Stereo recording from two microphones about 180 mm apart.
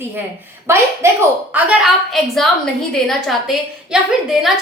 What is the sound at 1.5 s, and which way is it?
A woman's voice, 5° right (ahead or behind).